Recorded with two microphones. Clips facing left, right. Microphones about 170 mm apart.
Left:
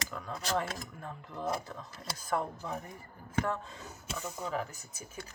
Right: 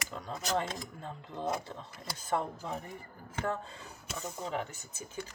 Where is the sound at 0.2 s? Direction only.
30° right (ahead or behind).